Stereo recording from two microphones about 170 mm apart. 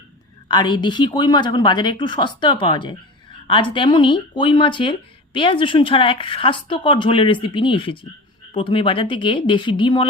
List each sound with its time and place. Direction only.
0.4 s speech: 25° left (ahead or behind)